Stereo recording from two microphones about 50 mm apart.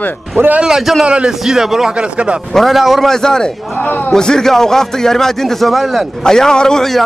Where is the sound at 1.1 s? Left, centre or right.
Right.